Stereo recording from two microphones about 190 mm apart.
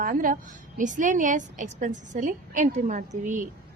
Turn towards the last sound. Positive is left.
turn(degrees=-45)  # may be behind; listen again after turning